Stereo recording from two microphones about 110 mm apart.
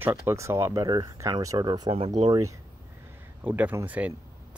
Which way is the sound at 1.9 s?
70° right (ahead or behind).